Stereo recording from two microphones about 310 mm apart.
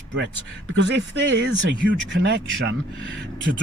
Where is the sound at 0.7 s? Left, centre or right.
Right.